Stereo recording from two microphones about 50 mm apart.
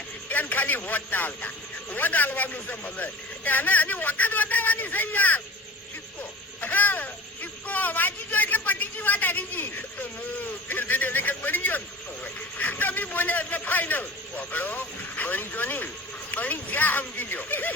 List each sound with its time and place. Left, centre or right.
0.3 s a man's voice: left
6.6 s a sound: left
10.7 s a man's voice: left